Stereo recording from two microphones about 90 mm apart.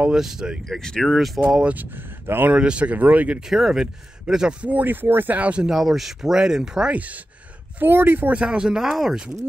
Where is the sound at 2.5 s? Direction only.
10° right (ahead or behind).